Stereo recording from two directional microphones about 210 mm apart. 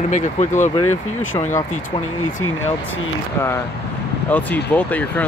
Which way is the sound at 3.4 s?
10° left (ahead or behind).